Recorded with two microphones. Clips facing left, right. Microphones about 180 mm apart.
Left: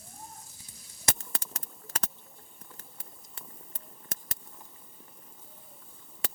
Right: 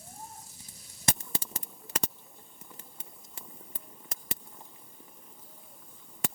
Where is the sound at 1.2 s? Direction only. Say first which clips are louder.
Right 2 dB; 15° right (ahead or behind).